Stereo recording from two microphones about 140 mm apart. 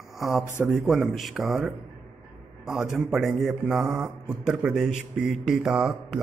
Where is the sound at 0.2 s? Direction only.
Centre (ahead or behind).